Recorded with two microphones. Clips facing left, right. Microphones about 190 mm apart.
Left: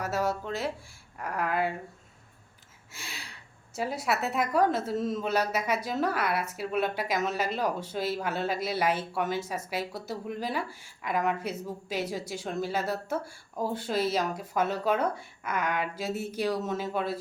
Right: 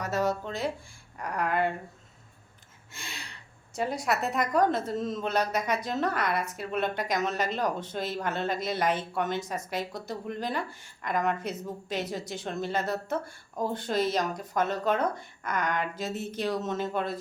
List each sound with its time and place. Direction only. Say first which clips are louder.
0.0 s a woman's voice: right 1 dB; 5° left (ahead or behind)
2.9 s a sound: right 1 dB; 5° left (ahead or behind)
3.8 s a woman's voice: right 1 dB; 5° left (ahead or behind)